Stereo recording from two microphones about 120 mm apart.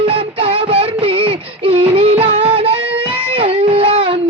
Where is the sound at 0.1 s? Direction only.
50° right (ahead or behind).